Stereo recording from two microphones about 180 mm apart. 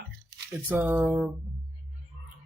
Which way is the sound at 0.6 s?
10° right (ahead or behind).